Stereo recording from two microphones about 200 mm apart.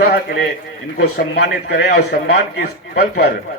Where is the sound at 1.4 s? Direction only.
55° left (ahead or behind).